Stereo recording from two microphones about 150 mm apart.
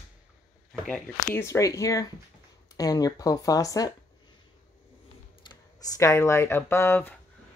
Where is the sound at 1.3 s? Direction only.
20° left (ahead or behind).